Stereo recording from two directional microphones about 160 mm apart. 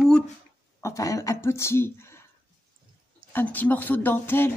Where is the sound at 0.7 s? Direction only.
20° left (ahead or behind).